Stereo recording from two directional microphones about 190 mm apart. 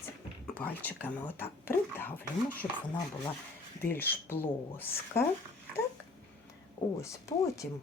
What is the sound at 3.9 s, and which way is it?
Speech, 10° left (ahead or behind).